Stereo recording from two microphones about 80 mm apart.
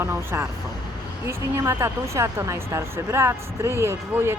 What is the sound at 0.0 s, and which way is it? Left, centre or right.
Speech, right.